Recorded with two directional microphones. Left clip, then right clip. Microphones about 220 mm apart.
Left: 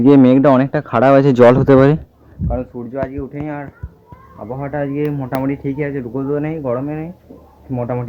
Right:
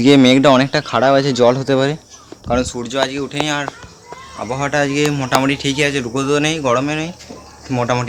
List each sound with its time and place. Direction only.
0.0 s speech: 5° left (ahead or behind)
1.0 s speech: 20° left (ahead or behind)
2.7 s speech: 15° right (ahead or behind)